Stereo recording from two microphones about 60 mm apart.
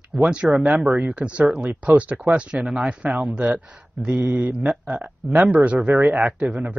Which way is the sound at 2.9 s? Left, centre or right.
Centre.